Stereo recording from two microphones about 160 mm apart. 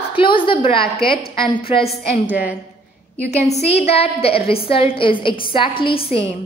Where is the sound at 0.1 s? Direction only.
30° left (ahead or behind).